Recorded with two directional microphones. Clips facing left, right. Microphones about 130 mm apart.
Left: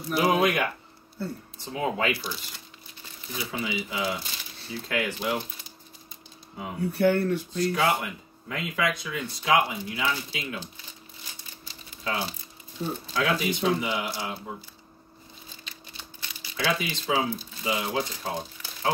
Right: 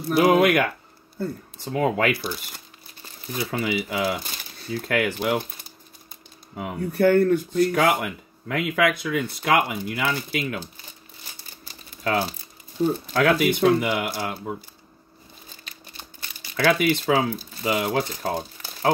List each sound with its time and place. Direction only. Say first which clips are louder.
0.1 s speech: right 6 dB; 60° right (ahead or behind)
1.8 s speech: right 5 dB; 65° right (ahead or behind)
3.3 s speech: right 6 dB; 55° right (ahead or behind)
6.5 s speech: right 2 dB; 55° right (ahead or behind)
11.6 s a sound: right 6 dB; 50° right (ahead or behind)
13.1 s speech: right 5 dB; 60° right (ahead or behind)
15.6 s a sound: right 3 dB; 50° right (ahead or behind)
17.6 s speech: right 5 dB; 55° right (ahead or behind)